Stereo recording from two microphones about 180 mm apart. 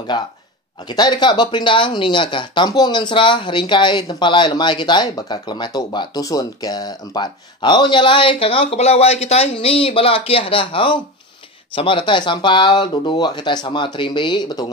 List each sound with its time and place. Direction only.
0.1 s speech: 25° left (ahead or behind)